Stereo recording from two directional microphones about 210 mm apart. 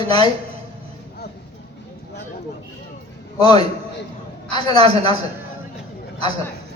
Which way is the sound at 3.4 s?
20° left (ahead or behind).